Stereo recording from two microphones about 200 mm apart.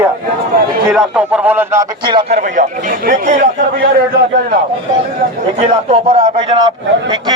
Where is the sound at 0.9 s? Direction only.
5° right (ahead or behind).